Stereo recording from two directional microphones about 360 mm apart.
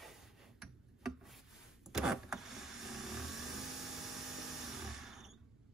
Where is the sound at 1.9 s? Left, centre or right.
Centre.